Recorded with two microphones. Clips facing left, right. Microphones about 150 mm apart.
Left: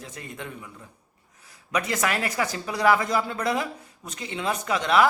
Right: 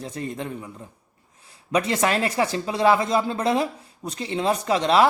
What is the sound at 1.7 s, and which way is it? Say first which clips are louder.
Speech: right 4 dB; 30° right (ahead or behind).